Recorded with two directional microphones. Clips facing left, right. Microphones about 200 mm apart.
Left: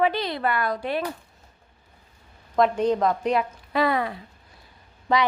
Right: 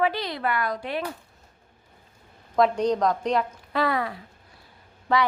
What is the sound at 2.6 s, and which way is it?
A woman's voice, centre (ahead or behind).